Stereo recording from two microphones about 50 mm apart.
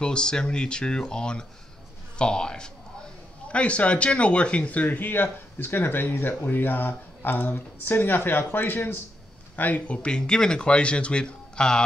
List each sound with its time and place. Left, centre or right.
0.0 s a man's voice: centre; by 8.9 s left
9.6 s speech: left; by 11.8 s centre